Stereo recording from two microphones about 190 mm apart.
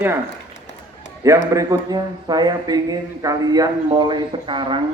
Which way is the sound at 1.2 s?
15° right (ahead or behind).